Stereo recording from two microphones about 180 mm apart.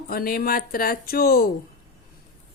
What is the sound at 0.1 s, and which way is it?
Speech, 55° left (ahead or behind).